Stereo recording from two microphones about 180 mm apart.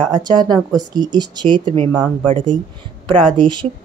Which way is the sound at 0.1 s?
25° right (ahead or behind).